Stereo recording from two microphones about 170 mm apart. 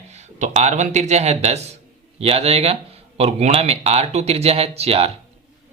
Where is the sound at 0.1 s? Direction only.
40° right (ahead or behind).